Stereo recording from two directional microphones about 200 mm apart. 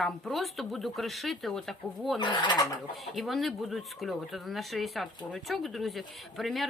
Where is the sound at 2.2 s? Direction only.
20° left (ahead or behind).